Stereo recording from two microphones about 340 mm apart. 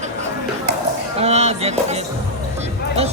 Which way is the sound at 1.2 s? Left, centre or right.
Centre.